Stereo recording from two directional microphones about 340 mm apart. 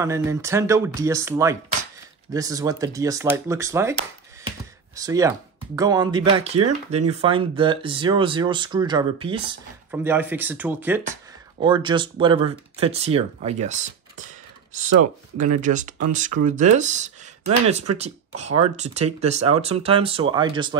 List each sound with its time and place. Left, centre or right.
0.0 s speech: centre
4.5 s a sound: centre
5.8 s speech: centre